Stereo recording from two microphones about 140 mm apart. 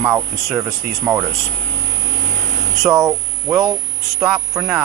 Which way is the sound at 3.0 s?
25° right (ahead or behind).